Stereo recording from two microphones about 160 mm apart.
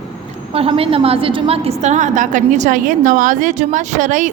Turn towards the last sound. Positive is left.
turn(degrees=-50)  # may be behind; listen again after turning